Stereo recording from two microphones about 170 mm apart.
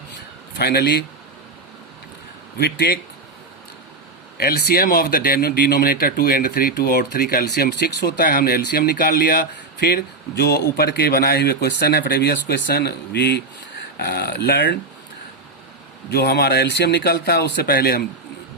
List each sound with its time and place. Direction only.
0.1 s a sound: 70° left (ahead or behind)
2.6 s speech: 75° left (ahead or behind)
4.4 s speech: 65° left (ahead or behind)
14.0 s speech: 65° left (ahead or behind)
16.0 s speech: 75° left (ahead or behind)